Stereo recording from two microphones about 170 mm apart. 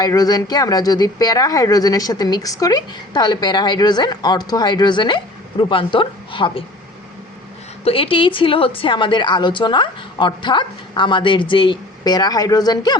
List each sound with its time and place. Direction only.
0.0 s speech: 20° left (ahead or behind)
7.9 s speech: 30° left (ahead or behind)